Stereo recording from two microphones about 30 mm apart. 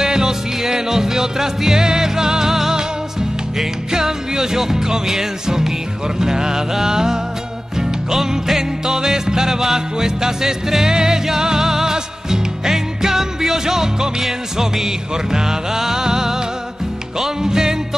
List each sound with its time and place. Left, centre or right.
0.0 s music: centre
3.5 s music: centre
7.7 s music: centre